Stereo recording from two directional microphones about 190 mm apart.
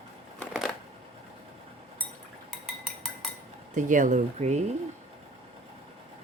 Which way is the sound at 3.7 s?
40° right (ahead or behind).